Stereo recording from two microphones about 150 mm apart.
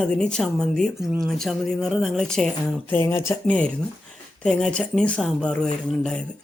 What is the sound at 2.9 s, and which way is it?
Speech, 15° left (ahead or behind).